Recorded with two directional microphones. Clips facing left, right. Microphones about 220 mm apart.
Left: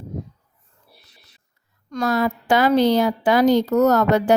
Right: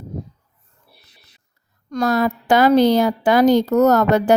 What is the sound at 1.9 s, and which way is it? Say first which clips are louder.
A woman's voice: right 2 dB; 40° right (ahead or behind).